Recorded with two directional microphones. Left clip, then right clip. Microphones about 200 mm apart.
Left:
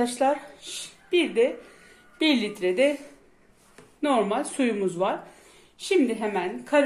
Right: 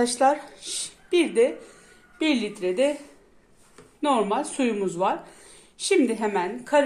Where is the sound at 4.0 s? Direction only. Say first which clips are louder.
Right 1 dB; 5° right (ahead or behind).